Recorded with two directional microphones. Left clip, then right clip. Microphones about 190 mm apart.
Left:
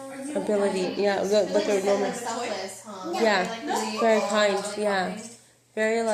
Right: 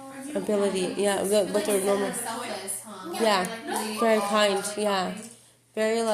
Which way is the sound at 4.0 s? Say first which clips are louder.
Even; 60° right (ahead or behind).